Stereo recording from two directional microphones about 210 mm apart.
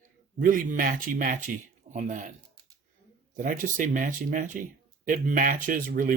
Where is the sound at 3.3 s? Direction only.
40° right (ahead or behind).